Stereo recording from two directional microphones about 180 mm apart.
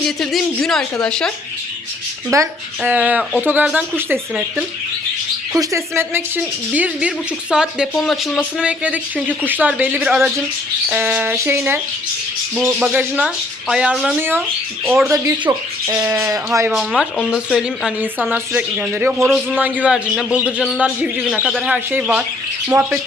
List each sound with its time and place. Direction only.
0.0 s speech: centre (ahead or behind)
2.3 s speech: 15° right (ahead or behind)
15.1 s speech: 20° right (ahead or behind)